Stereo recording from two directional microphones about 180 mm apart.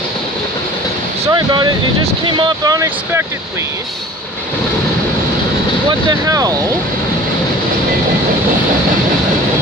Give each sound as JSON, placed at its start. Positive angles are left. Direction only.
{"t": 1.3, "sound": "speech", "side_deg": -25}
{"t": 5.9, "sound": "speech", "side_deg": -20}